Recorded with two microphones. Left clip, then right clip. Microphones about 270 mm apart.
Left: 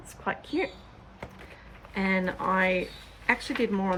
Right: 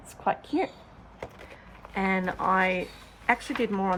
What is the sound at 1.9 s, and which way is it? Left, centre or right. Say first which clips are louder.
Speech: right 1 dB; centre.